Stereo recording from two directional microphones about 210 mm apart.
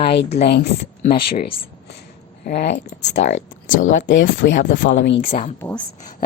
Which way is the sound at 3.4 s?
65° left (ahead or behind).